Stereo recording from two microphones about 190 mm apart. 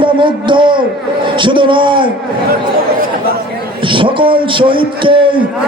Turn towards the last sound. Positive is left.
turn(degrees=-25)  # may be behind; listen again after turning